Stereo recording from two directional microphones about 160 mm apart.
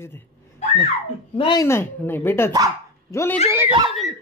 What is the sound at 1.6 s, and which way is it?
Speech, 15° left (ahead or behind).